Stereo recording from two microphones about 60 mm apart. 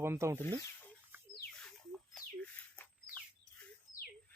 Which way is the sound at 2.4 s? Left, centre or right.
Left.